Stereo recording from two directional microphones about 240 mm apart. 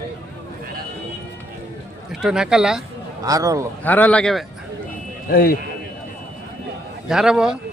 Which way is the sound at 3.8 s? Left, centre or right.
Centre.